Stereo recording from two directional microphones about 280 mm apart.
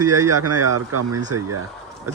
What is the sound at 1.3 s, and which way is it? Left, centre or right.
Speech, right.